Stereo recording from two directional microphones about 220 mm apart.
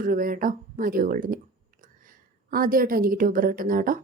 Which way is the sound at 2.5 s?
40° right (ahead or behind).